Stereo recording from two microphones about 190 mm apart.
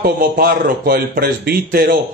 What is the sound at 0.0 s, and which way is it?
Speech, 50° right (ahead or behind).